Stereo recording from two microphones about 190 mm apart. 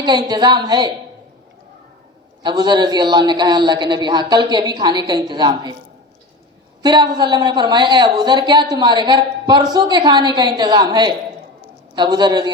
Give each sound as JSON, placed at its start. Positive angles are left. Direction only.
{"t": 0.0, "sound": "a man's voice", "side_deg": -25}
{"t": 2.4, "sound": "a man's voice", "side_deg": -25}
{"t": 6.8, "sound": "a man's voice", "side_deg": -20}